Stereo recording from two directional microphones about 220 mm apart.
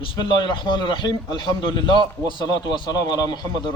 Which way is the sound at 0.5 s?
20° left (ahead or behind).